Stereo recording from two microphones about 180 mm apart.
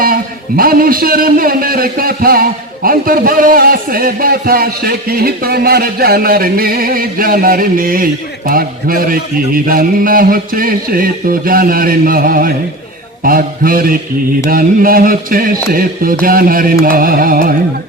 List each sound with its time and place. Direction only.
0.0 s a man's voice: 55° right (ahead or behind)